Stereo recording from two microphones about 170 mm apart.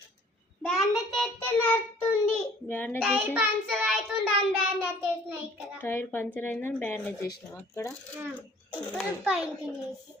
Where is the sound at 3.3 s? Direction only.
5° right (ahead or behind).